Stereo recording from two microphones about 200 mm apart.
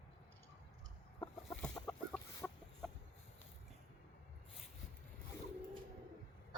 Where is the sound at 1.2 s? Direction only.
10° left (ahead or behind).